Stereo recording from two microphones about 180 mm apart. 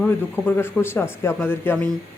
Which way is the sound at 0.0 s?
10° left (ahead or behind).